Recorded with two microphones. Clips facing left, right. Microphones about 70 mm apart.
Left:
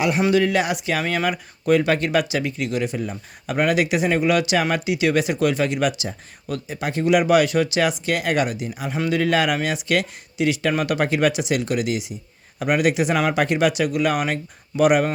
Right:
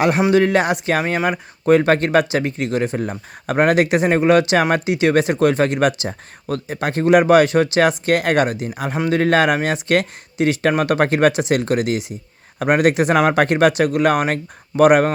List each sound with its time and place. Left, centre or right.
0.2 s speech: right